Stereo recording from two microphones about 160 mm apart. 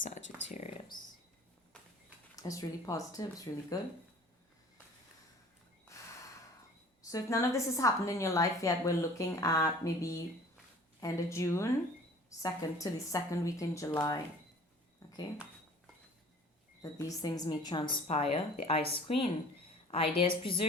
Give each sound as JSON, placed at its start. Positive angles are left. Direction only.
{"t": 0.4, "sound": "a sound", "side_deg": 45}
{"t": 2.3, "sound": "a woman's voice", "side_deg": 20}
{"t": 7.1, "sound": "a woman's voice", "side_deg": 20}
{"t": 16.8, "sound": "a woman's voice", "side_deg": 20}